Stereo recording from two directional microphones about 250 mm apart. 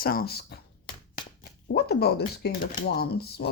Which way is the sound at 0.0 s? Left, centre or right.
Left.